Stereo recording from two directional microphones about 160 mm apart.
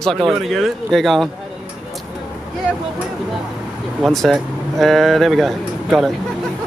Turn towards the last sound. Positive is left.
turn(degrees=0)  # may be behind; listen again after turning